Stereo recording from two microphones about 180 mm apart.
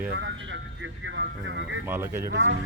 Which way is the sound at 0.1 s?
80° right.